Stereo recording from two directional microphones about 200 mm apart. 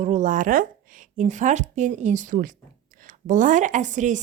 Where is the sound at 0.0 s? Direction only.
40° right (ahead or behind).